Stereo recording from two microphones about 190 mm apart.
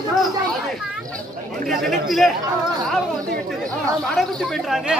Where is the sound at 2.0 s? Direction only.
Centre (ahead or behind).